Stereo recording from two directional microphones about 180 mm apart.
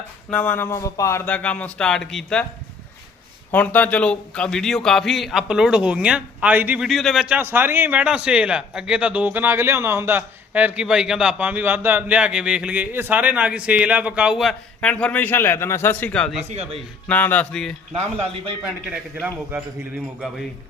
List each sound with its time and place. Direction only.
0.3 s speech: 10° left (ahead or behind)
3.5 s a man's voice: 10° left (ahead or behind)
16.5 s speech: 35° right (ahead or behind)
17.1 s speech: 10° left (ahead or behind)
17.9 s speech: 35° right (ahead or behind)
18.6 s a man's voice: 10° right (ahead or behind)